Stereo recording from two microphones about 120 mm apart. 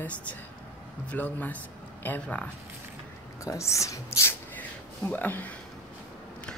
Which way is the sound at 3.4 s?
25° left (ahead or behind).